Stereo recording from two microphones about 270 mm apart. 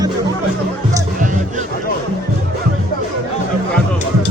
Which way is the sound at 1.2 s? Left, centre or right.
Right.